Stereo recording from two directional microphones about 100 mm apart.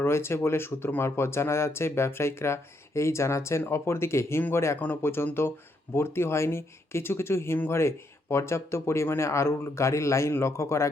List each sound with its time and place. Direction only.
0.0 s speech: 25° left (ahead or behind)